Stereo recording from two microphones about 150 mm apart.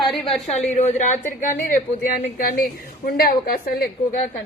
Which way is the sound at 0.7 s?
50° left (ahead or behind).